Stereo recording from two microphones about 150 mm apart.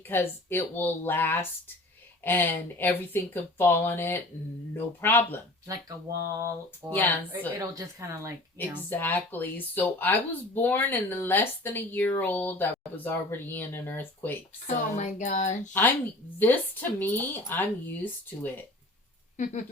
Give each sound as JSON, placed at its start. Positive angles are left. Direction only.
{"t": 0.1, "sound": "speech", "side_deg": 15}
{"t": 5.6, "sound": "speech", "side_deg": -20}
{"t": 7.0, "sound": "speech", "side_deg": 10}
{"t": 7.6, "sound": "speech", "side_deg": -20}
{"t": 8.5, "sound": "speech", "side_deg": 15}
{"t": 14.9, "sound": "speech", "side_deg": 55}
{"t": 16.4, "sound": "speech", "side_deg": 10}
{"t": 19.4, "sound": "speech", "side_deg": 50}